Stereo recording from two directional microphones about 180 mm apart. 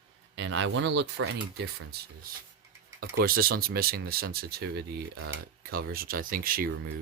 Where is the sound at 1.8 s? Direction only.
55° right (ahead or behind).